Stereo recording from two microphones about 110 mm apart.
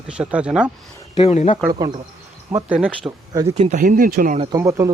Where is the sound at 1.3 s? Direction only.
75° left (ahead or behind).